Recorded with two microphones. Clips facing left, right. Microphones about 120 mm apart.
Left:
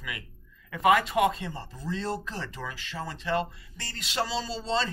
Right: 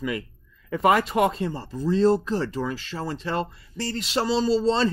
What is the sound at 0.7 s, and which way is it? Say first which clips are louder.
Speech: right 3 dB; 35° right (ahead or behind).